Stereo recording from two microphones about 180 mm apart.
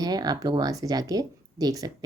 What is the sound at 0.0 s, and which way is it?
Speech, 20° right (ahead or behind).